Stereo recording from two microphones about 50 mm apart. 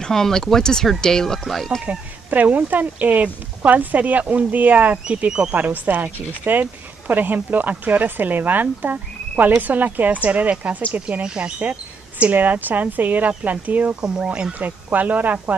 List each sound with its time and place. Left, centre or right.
0.0 s speech: centre
1.9 s speech: right
14.0 s speech: centre
14.6 s speech: right